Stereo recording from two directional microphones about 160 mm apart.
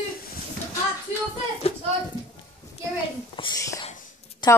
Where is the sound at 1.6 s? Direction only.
40° left (ahead or behind).